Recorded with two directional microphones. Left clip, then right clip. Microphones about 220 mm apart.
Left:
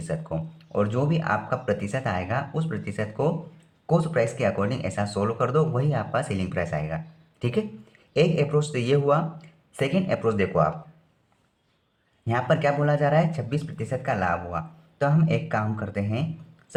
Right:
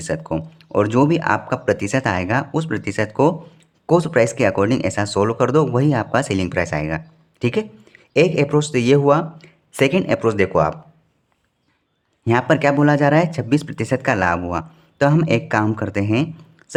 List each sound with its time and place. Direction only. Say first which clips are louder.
0.0 s speech: right 8 dB; 40° right (ahead or behind)
12.2 s speech: right 7 dB; 40° right (ahead or behind)